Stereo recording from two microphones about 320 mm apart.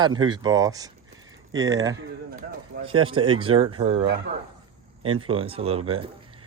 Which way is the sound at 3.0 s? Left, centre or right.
Centre.